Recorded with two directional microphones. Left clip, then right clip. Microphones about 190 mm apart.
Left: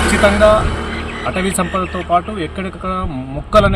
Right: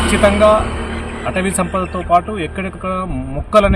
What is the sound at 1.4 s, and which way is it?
A man's voice, centre (ahead or behind).